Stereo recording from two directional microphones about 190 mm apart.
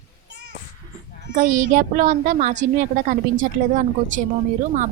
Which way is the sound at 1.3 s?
40° right (ahead or behind).